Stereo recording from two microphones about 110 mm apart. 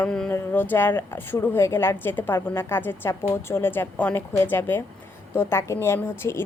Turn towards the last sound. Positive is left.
turn(degrees=20)  # may be behind; listen again after turning